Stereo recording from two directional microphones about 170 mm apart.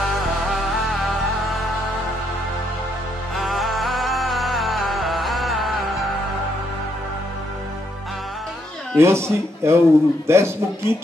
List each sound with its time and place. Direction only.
0.1 s music: centre (ahead or behind)
3.3 s music: centre (ahead or behind)
8.9 s a man's voice: 15° right (ahead or behind)